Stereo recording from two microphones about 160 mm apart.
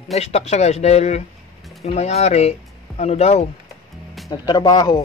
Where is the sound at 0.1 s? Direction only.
40° left (ahead or behind).